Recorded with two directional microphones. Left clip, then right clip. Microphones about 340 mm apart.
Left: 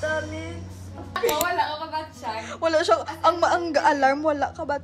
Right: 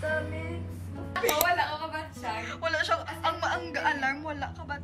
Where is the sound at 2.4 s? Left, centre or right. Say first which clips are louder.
Left 8 dB; centre.